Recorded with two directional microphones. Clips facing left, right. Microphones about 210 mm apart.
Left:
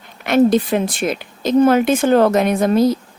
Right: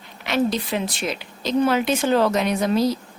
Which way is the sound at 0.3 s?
50° left (ahead or behind).